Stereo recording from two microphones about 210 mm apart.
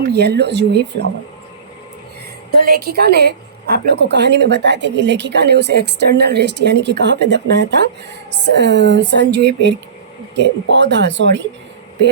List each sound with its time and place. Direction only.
0.1 s a woman's voice: 50° right (ahead or behind)
2.5 s a woman's voice: 45° right (ahead or behind)